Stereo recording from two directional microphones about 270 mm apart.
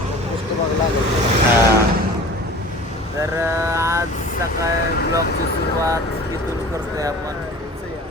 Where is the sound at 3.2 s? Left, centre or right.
Centre.